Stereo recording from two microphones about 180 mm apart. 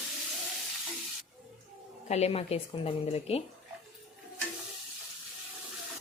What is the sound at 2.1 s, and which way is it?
A woman's voice, 35° left (ahead or behind).